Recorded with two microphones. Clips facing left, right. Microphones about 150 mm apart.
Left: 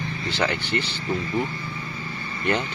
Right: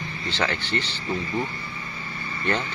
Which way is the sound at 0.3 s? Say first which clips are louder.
Left 1 dB; 10° left (ahead or behind).